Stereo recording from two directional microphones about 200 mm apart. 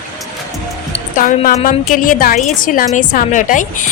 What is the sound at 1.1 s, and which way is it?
A woman's voice, 40° left (ahead or behind).